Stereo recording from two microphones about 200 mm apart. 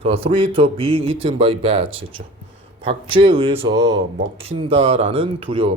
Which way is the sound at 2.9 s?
25° right (ahead or behind).